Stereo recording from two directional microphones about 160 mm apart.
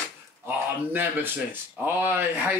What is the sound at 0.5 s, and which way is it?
Speech, 10° right (ahead or behind).